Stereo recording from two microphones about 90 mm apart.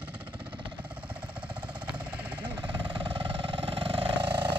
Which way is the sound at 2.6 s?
70° right (ahead or behind).